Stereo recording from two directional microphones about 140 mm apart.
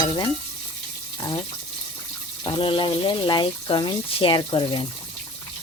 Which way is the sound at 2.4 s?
35° left (ahead or behind).